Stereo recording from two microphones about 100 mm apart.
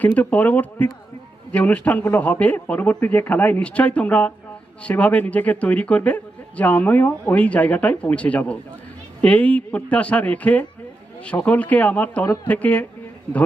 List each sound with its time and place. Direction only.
0.0 s a man's voice: 15° left (ahead or behind)